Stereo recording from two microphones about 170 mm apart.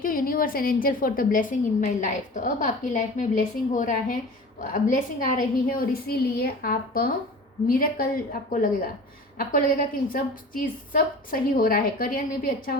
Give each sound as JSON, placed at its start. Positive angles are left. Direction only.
{"t": 0.0, "sound": "a woman's voice", "side_deg": 55}